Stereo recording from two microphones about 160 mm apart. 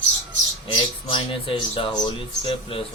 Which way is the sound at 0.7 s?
30° left (ahead or behind).